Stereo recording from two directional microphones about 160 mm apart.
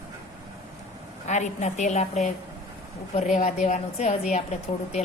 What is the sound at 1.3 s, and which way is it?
A woman's voice, 50° left (ahead or behind).